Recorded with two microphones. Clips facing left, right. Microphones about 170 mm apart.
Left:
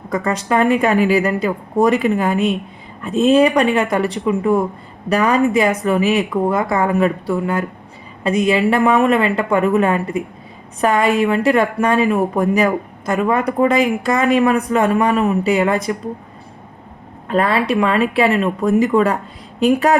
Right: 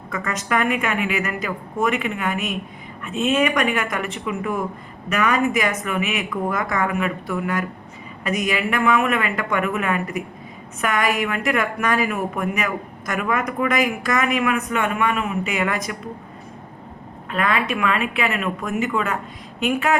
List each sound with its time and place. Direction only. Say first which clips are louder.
0.1 s a woman's voice: left 6 dB; 30° left (ahead or behind)
17.2 s a woman's voice: left 6 dB; 35° left (ahead or behind)